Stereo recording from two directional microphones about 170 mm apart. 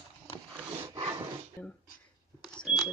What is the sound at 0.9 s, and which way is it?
Dog, 30° right (ahead or behind).